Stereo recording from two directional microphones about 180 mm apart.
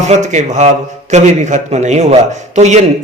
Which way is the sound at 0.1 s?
40° right (ahead or behind).